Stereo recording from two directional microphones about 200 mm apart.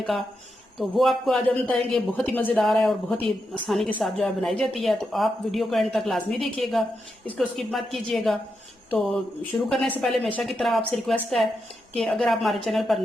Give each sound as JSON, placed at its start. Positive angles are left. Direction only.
{"t": 0.0, "sound": "speech", "side_deg": 0}